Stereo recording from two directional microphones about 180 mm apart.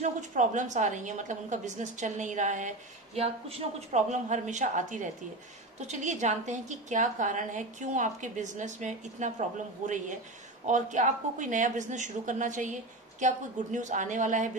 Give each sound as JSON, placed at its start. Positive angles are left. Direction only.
{"t": 0.0, "sound": "a woman's voice", "side_deg": -45}
{"t": 3.2, "sound": "a woman's voice", "side_deg": -30}